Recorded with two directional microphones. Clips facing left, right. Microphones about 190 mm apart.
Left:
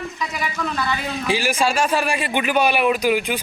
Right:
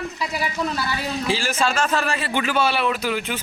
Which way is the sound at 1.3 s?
15° left (ahead or behind).